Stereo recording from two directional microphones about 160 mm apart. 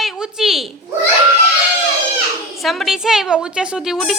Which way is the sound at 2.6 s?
Centre (ahead or behind).